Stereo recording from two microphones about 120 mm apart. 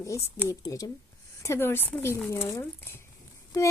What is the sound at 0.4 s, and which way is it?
Speech, 25° left (ahead or behind).